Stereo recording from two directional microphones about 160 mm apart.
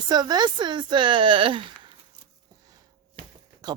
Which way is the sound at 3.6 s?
25° right (ahead or behind).